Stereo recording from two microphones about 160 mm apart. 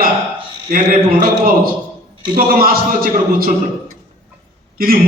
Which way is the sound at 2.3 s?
65° right (ahead or behind).